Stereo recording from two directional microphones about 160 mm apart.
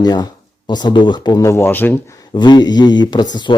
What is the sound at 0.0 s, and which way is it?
Speech, 25° left (ahead or behind).